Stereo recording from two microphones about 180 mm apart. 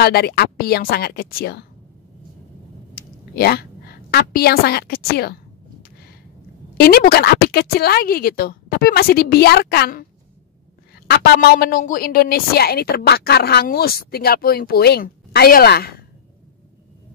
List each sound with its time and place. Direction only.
0.0 s a woman's voice: 60° left (ahead or behind)
2.9 s a sound: 55° left (ahead or behind)
6.8 s a woman's voice: 55° left (ahead or behind)
11.1 s a woman's voice: 60° left (ahead or behind)